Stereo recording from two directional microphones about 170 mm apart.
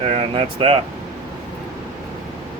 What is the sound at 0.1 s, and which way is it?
Speech, 35° right (ahead or behind).